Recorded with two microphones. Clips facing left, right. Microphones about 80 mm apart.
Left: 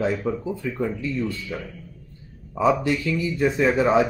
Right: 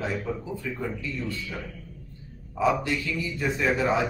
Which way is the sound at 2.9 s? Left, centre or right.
Left.